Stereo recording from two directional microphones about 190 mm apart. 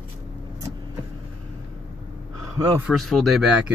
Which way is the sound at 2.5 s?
20° right (ahead or behind).